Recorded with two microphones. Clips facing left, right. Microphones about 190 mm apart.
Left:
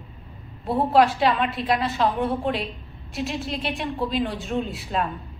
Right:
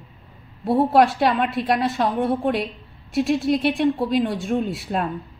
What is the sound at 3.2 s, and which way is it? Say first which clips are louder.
Speech: right 9 dB; 55° right (ahead or behind).